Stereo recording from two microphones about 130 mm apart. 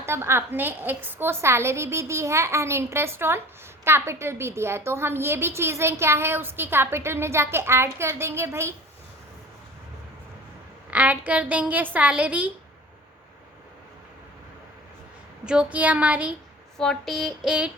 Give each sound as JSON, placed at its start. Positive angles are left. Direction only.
{"t": 0.0, "sound": "a woman's voice", "side_deg": -20}
{"t": 10.9, "sound": "a woman's voice", "side_deg": -10}
{"t": 15.4, "sound": "a woman's voice", "side_deg": -10}
{"t": 16.7, "sound": "a sound", "side_deg": 5}